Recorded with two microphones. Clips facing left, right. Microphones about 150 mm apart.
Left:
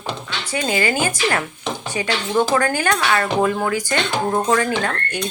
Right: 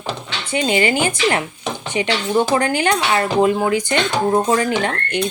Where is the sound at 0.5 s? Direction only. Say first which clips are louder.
Right 3 dB; 20° right (ahead or behind).